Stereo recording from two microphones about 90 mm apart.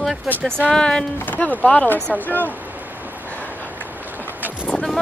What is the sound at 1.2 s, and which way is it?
Speech, 20° left (ahead or behind).